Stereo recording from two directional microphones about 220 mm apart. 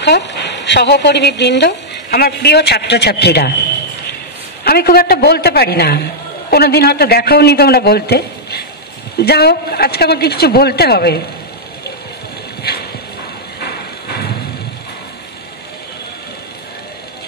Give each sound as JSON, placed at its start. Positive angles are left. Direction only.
{"t": 0.0, "sound": "speech", "side_deg": 50}
{"t": 4.6, "sound": "speech", "side_deg": 45}